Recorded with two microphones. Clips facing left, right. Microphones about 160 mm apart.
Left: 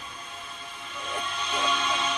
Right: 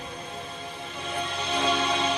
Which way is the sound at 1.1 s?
35° right (ahead or behind).